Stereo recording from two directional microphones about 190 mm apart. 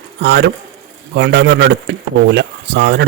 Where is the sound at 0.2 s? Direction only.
65° right (ahead or behind).